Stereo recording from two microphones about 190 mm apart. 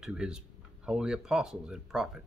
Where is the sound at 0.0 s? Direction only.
5° right (ahead or behind).